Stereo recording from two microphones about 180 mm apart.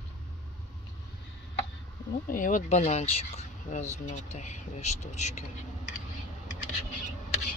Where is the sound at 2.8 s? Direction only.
35° left (ahead or behind).